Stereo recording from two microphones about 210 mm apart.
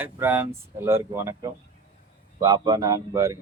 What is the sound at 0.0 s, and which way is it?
Speech, 10° right (ahead or behind).